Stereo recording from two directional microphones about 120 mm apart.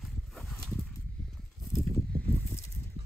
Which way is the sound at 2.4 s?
25° left (ahead or behind).